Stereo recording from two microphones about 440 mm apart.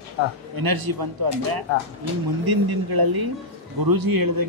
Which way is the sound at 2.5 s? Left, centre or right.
Right.